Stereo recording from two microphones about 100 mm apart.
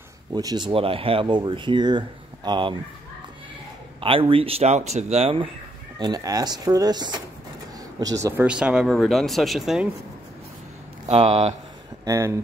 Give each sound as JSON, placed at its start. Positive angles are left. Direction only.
{"t": 0.3, "sound": "speech", "side_deg": -40}
{"t": 0.7, "sound": "speech", "side_deg": -65}
{"t": 1.2, "sound": "speech", "side_deg": -50}
{"t": 4.0, "sound": "speech", "side_deg": -65}
{"t": 5.9, "sound": "speech", "side_deg": -45}
{"t": 8.0, "sound": "speech", "side_deg": -35}
{"t": 8.4, "sound": "speech", "side_deg": -10}
{"t": 8.8, "sound": "speech", "side_deg": 0}
{"t": 11.1, "sound": "speech", "side_deg": -80}
{"t": 12.0, "sound": "speech", "side_deg": -30}